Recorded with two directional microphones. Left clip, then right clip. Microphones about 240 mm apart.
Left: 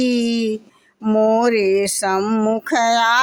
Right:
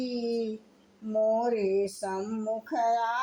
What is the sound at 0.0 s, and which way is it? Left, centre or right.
Speech, left.